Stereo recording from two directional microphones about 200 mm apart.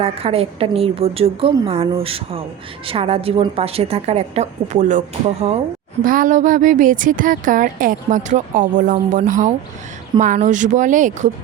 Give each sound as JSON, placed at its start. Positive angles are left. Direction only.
{"t": 0.0, "sound": "a woman's voice", "side_deg": -30}